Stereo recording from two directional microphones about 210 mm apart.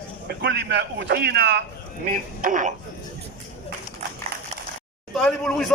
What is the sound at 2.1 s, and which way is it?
Speech, 40° right (ahead or behind).